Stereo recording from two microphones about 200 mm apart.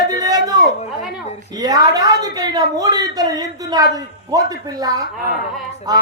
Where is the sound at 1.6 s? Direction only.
20° right (ahead or behind).